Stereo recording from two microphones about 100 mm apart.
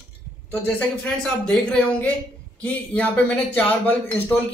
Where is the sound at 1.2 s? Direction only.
10° left (ahead or behind).